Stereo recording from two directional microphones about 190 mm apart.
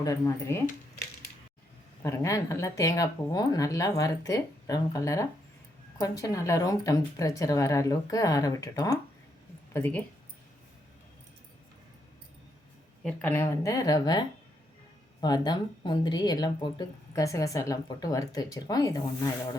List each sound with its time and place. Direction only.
0.0 s speech: 15° left (ahead or behind)
2.0 s speech: 15° left (ahead or behind)
13.0 s speech: 5° left (ahead or behind)